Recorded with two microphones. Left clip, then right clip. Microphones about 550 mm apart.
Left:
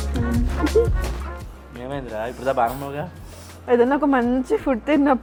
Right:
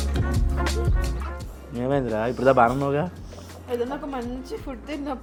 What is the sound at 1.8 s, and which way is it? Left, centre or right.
Speech, right.